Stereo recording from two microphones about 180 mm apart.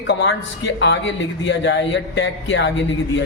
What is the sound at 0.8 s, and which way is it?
A man's voice, 90° left.